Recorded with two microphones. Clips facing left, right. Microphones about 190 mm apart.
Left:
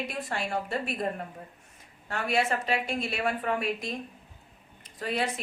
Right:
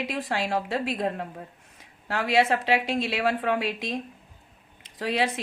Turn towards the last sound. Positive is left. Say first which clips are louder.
# right 4 dB
turn(degrees=-90)